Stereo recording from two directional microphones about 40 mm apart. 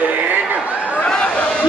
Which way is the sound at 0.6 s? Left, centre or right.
Right.